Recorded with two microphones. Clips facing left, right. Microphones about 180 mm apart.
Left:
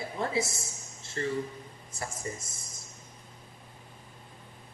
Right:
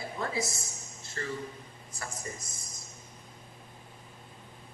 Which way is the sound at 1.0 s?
25° left (ahead or behind).